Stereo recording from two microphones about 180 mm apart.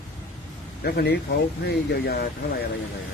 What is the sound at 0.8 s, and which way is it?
Speech, 65° left (ahead or behind).